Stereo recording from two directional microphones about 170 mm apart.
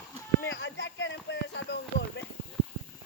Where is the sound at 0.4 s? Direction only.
90° left.